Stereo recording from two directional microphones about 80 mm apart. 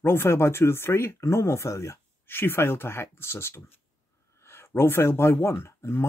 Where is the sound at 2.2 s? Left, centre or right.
Left.